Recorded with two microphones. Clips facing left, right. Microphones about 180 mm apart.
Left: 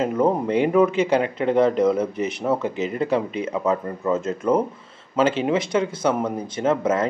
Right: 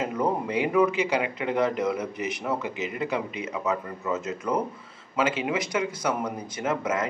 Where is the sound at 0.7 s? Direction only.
25° left (ahead or behind).